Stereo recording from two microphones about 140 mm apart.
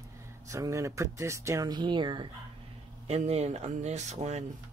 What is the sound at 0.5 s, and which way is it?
Speech, 20° right (ahead or behind).